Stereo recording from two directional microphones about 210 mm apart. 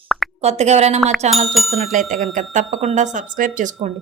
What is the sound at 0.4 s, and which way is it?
A woman's voice, 30° right (ahead or behind).